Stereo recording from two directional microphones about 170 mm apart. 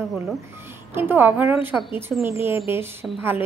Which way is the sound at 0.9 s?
10° right (ahead or behind).